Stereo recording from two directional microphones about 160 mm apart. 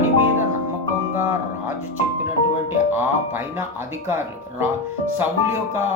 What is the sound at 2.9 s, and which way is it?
Speech, 15° right (ahead or behind).